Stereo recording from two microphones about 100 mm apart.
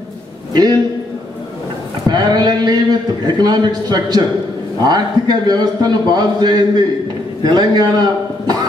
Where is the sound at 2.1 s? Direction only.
45° right (ahead or behind).